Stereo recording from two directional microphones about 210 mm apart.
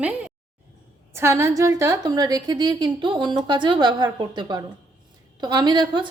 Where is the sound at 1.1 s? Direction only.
10° right (ahead or behind).